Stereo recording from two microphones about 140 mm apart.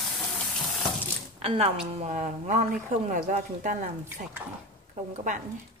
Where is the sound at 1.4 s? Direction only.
45° right (ahead or behind).